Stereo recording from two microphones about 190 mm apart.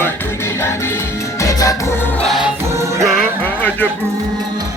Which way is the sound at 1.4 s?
20° left (ahead or behind).